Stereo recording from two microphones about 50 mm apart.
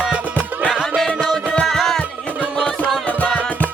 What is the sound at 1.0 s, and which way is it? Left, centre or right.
Music, centre.